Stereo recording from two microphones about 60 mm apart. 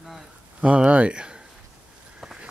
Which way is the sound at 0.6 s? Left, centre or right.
Right.